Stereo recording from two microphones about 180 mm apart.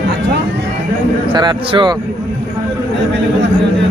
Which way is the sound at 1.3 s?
25° right (ahead or behind).